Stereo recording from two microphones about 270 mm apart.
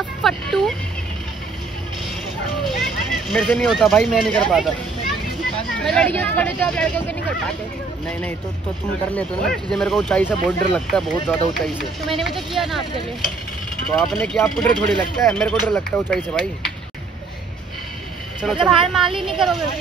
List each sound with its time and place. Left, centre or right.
0.2 s a sound: centre
3.1 s speech: centre
5.9 s speech: centre
8.1 s speech: centre
13.9 s speech: centre
18.4 s speech: centre